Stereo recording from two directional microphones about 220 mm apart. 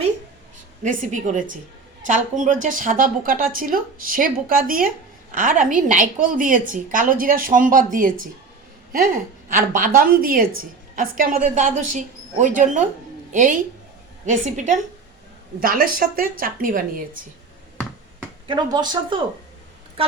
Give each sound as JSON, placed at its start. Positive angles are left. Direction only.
{"t": 0.8, "sound": "a woman's voice", "side_deg": -35}
{"t": 18.4, "sound": "speech", "side_deg": -20}